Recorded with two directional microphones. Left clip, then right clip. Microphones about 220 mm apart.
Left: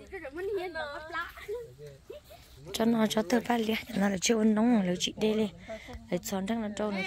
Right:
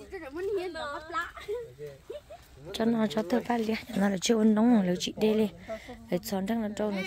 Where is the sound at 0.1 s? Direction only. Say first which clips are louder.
Right 2 dB; 15° right (ahead or behind).